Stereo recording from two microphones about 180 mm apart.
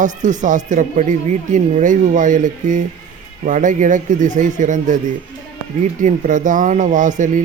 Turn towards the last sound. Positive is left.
turn(degrees=-45)  # may be behind; listen again after turning